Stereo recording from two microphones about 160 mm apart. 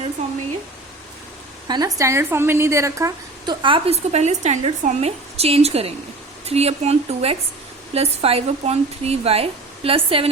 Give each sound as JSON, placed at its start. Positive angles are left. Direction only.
{"t": 1.6, "sound": "a woman's voice", "side_deg": -25}